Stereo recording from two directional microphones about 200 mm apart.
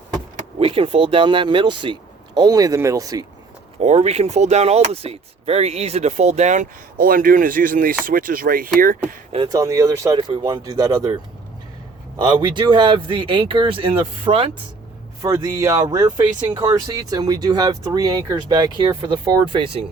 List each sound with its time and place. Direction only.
0.6 s speech: 30° right (ahead or behind)
3.8 s speech: 35° right (ahead or behind)
9.3 s speech: 20° right (ahead or behind)
12.2 s speech: 20° right (ahead or behind)
15.2 s a man's voice: 15° right (ahead or behind)